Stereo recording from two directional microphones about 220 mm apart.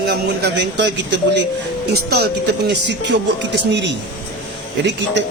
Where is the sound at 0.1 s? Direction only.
50° right (ahead or behind).